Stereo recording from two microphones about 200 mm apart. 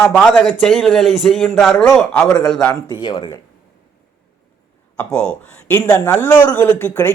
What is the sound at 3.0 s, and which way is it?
Speech, 20° left (ahead or behind).